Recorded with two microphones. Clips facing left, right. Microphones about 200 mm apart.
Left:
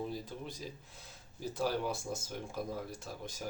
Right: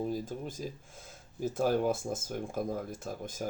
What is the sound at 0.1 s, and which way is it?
Speech, 45° right (ahead or behind).